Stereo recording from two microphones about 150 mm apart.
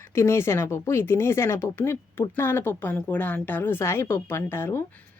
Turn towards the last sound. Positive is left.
turn(degrees=15)  # may be behind; listen again after turning